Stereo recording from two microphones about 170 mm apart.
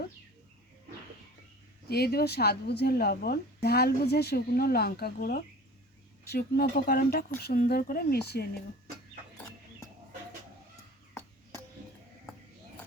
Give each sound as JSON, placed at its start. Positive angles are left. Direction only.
{"t": 1.9, "sound": "speech", "side_deg": 70}
{"t": 11.1, "sound": "chop", "side_deg": 15}